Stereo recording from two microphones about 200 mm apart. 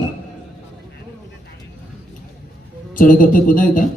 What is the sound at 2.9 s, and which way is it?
Speech, 40° left (ahead or behind).